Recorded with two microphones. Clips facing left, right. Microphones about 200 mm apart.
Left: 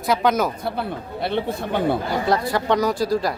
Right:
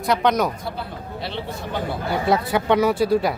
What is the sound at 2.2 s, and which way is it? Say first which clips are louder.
Speech: right 2 dB; 5° right (ahead or behind).